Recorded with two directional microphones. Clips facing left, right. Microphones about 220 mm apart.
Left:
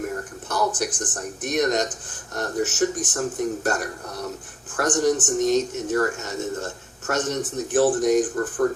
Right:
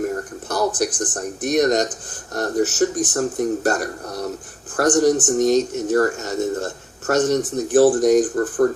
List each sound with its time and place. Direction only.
0.4 s speech: 35° right (ahead or behind)